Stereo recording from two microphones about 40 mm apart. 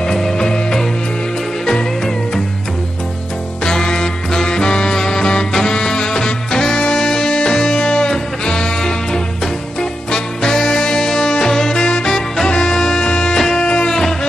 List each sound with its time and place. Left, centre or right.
0.0 s music: centre
3.6 s music: centre